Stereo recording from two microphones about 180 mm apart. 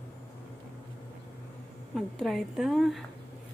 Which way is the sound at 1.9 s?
Centre (ahead or behind).